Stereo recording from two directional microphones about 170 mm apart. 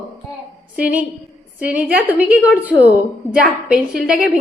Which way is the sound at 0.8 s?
10° right (ahead or behind).